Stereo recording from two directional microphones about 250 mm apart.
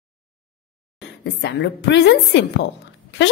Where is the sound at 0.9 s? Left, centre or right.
Left.